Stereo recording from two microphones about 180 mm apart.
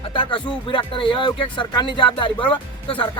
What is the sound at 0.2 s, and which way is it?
Speech, 25° left (ahead or behind).